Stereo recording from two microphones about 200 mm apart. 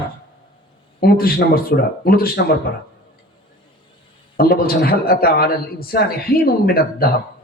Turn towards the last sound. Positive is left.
turn(degrees=50)  # may be behind; listen again after turning